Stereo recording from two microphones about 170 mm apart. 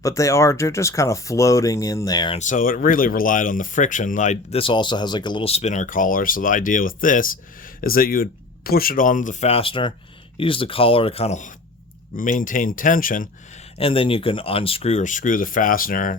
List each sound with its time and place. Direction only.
0.0 s speech: 20° left (ahead or behind)
2.4 s speech: 50° left (ahead or behind)
4.6 s speech: 30° left (ahead or behind); by 13.2 s 55° left (ahead or behind)
13.7 s speech: 35° left (ahead or behind); by 16.1 s 55° left (ahead or behind)